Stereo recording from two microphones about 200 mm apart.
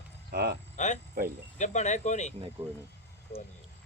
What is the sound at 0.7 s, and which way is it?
Speech, 35° left (ahead or behind).